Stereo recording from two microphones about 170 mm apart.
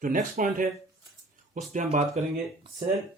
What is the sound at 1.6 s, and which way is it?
Speech, 40° right (ahead or behind).